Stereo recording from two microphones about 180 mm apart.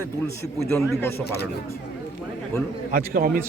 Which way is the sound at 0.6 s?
Centre (ahead or behind).